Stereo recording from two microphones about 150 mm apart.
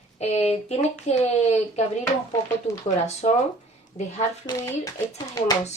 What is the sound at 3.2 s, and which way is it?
Speech, 55° left (ahead or behind).